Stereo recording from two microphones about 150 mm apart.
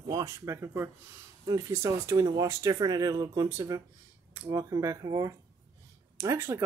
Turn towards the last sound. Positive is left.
turn(degrees=-20)  # may be behind; listen again after turning